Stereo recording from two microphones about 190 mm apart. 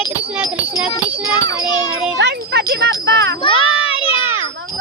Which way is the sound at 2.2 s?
60° right (ahead or behind).